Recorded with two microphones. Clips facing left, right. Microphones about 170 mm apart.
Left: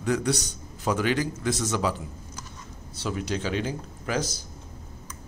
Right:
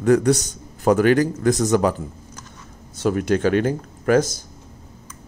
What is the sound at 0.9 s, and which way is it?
Speech, 55° right (ahead or behind).